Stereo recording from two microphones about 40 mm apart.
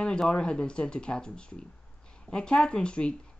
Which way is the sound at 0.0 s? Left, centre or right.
Left.